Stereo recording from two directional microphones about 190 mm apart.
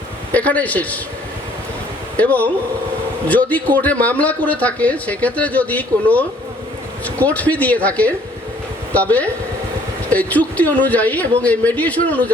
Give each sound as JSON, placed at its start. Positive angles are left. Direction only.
{"t": 0.3, "sound": "speech", "side_deg": 5}
{"t": 2.1, "sound": "speech", "side_deg": 10}